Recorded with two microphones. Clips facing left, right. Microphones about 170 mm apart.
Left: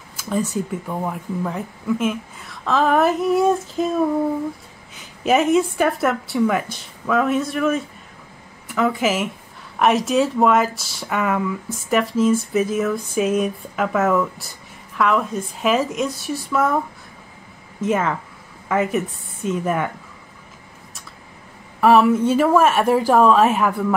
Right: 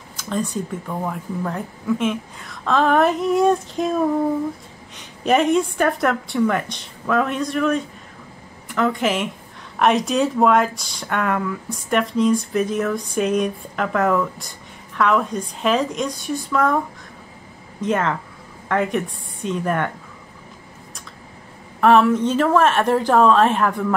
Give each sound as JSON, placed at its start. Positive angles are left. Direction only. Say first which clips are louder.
{"t": 0.1, "sound": "speech", "louder": "left 2 dB", "side_deg": 10}
{"t": 4.9, "sound": "speech", "louder": "even", "side_deg": 5}
{"t": 17.7, "sound": "a woman's voice", "louder": "left 1 dB", "side_deg": 5}
{"t": 21.8, "sound": "speech", "louder": "left 1 dB", "side_deg": 5}